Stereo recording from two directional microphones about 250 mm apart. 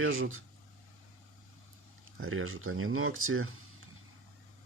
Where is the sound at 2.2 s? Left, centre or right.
Right.